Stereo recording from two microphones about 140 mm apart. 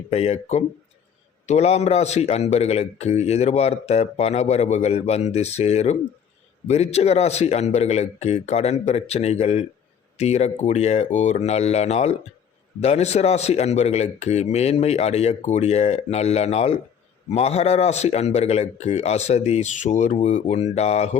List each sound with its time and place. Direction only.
0.1 s a man's voice: 50° left (ahead or behind)